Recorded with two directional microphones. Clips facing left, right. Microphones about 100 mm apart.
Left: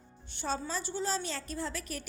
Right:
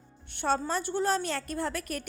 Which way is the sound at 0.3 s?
60° right (ahead or behind).